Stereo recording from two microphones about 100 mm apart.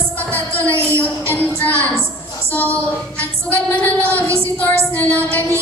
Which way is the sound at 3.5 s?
15° left (ahead or behind).